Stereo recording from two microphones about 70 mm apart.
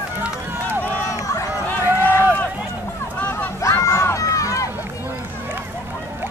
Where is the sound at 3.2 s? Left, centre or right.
Left.